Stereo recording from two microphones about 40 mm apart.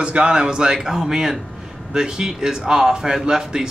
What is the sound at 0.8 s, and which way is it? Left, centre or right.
A man's voice, centre.